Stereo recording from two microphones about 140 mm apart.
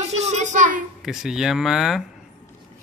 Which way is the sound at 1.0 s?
5° right (ahead or behind).